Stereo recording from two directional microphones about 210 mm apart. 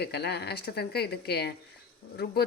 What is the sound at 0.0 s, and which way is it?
A woman's voice, 50° left (ahead or behind).